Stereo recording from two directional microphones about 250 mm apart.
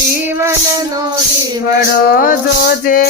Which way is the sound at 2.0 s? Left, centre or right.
Left.